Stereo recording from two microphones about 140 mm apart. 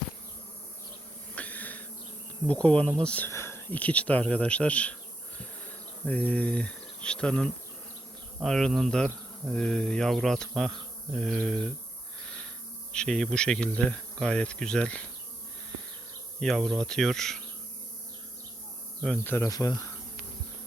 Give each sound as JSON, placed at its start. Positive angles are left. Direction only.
{"t": 1.4, "sound": "a sound", "side_deg": 10}
{"t": 2.5, "sound": "speech", "side_deg": 10}
{"t": 5.4, "sound": "insect", "side_deg": 10}
{"t": 12.9, "sound": "speech", "side_deg": 5}
{"t": 16.4, "sound": "insect", "side_deg": 0}
{"t": 19.0, "sound": "speech", "side_deg": 15}
{"t": 19.5, "sound": "speech", "side_deg": 25}